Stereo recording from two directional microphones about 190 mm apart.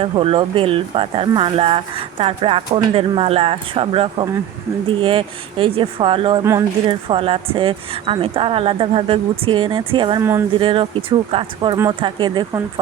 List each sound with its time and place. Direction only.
0.0 s speech: 30° right (ahead or behind)
6.4 s speech: 15° right (ahead or behind)
6.8 s speech: 25° right (ahead or behind)